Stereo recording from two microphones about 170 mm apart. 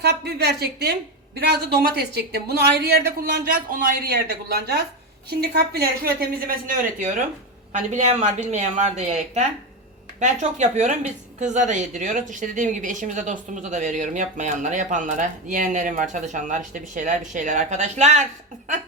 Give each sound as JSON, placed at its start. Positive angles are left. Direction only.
{"t": 0.0, "sound": "a woman's voice", "side_deg": -75}